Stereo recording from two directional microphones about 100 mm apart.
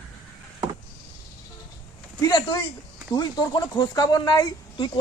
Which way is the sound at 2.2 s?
50° left (ahead or behind).